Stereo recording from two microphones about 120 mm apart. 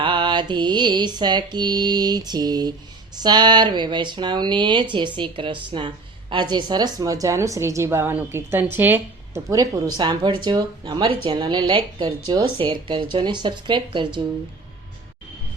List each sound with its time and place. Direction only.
0.0 s a woman's voice: 45° right (ahead or behind); by 9.4 s 15° right (ahead or behind)
9.5 s a woman's voice: 30° right (ahead or behind)
11.0 s a woman's voice: 50° right (ahead or behind)